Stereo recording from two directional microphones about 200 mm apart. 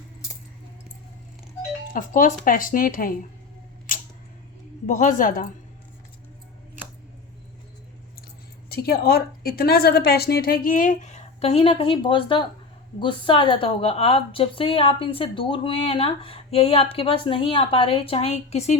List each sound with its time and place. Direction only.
1.9 s a woman's voice: 40° left (ahead or behind)
3.9 s camera: 40° left (ahead or behind)
4.9 s a woman's voice: 40° left (ahead or behind)
8.7 s a woman's voice: 50° left (ahead or behind); by 18.8 s 35° left (ahead or behind)